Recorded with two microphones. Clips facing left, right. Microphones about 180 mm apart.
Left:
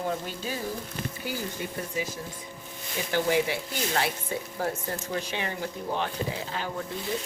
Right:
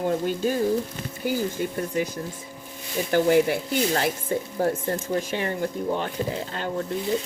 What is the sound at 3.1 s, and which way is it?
Speech, 50° right (ahead or behind).